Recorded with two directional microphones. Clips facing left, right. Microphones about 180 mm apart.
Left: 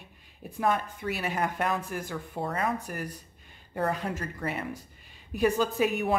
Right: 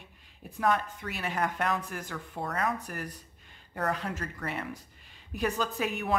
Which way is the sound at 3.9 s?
10° left (ahead or behind).